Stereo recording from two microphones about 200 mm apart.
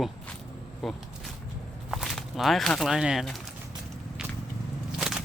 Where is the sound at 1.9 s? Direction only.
Centre (ahead or behind).